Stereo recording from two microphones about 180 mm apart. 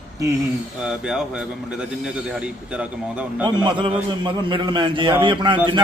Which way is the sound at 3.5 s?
25° right (ahead or behind).